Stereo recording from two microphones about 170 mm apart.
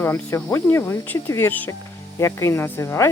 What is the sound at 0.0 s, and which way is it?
Speech, 15° left (ahead or behind).